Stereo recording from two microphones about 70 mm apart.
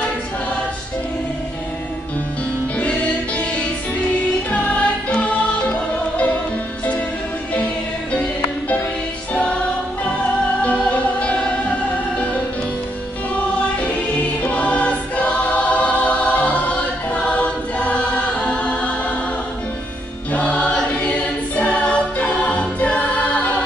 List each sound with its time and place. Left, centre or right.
2.8 s music: centre
7.5 s music: left
10.9 s music: centre
14.4 s choir: left
20.3 s choir: centre